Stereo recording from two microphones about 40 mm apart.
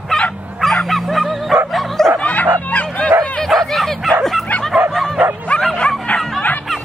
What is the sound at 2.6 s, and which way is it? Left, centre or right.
Bow-wow, left.